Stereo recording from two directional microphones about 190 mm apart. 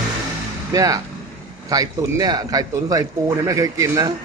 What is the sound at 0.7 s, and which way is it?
A man's voice, 20° right (ahead or behind).